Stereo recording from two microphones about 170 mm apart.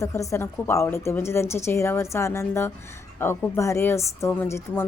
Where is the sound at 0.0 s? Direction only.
20° left (ahead or behind).